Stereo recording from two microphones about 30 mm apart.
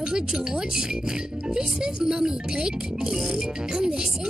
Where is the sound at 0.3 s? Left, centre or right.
Right.